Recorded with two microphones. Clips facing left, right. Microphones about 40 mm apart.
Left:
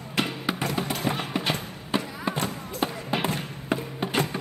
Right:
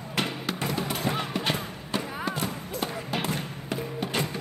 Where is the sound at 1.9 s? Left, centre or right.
Left.